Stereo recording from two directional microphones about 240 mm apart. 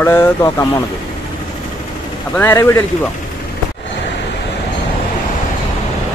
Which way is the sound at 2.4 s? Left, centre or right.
Centre.